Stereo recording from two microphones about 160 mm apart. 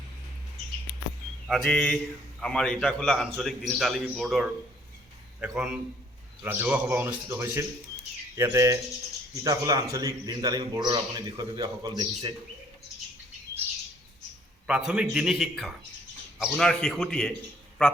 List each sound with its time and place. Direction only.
1.5 s a man's voice: centre (ahead or behind); by 12.3 s 25° right (ahead or behind)
14.7 s a man's voice: 5° right (ahead or behind)